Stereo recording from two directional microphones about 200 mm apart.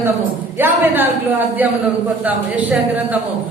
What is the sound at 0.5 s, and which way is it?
Speech, 10° right (ahead or behind).